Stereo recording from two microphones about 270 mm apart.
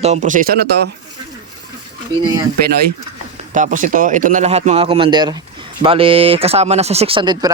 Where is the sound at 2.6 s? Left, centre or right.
Right.